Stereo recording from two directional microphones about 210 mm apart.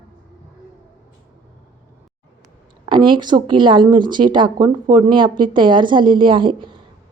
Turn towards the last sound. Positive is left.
turn(degrees=-25)  # may be behind; listen again after turning